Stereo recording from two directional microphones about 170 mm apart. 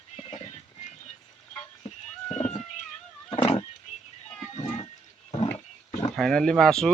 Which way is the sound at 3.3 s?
35° left (ahead or behind).